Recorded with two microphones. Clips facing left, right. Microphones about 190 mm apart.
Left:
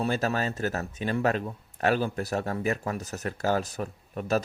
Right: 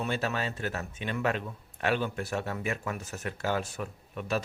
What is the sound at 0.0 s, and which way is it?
Speech, 40° left (ahead or behind).